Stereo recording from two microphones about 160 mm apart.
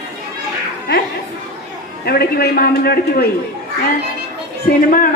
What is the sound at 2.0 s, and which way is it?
A man's voice, 75° left (ahead or behind).